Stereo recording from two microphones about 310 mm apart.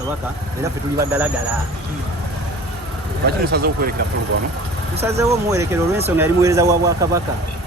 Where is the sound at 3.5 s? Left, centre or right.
Right.